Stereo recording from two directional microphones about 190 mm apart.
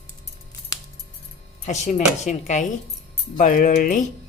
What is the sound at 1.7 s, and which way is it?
Speech, 40° left (ahead or behind).